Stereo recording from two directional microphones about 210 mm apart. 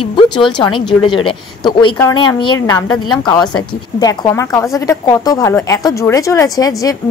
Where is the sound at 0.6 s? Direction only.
20° left (ahead or behind).